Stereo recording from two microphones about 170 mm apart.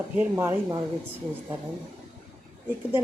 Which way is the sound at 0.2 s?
15° right (ahead or behind).